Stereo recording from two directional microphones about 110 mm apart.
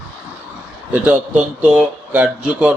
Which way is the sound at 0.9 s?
15° right (ahead or behind).